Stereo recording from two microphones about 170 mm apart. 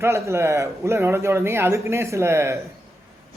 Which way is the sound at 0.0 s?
15° right (ahead or behind).